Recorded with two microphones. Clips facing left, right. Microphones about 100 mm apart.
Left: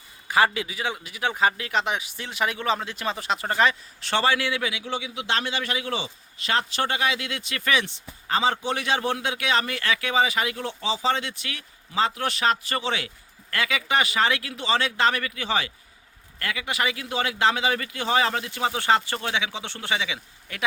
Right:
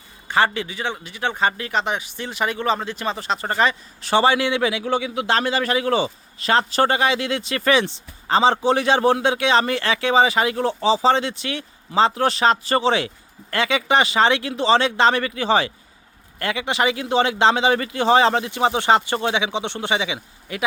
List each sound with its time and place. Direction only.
0.3 s a man's voice: 5° left (ahead or behind)
4.1 s a man's voice: 20° right (ahead or behind)
4.8 s a man's voice: 50° right (ahead or behind); by 20.2 s 20° right (ahead or behind)
20.5 s a man's voice: 10° right (ahead or behind)